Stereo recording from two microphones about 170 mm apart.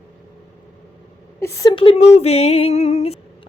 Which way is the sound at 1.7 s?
30° left (ahead or behind).